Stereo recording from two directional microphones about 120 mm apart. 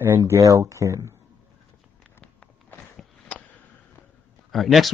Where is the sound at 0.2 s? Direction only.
30° right (ahead or behind).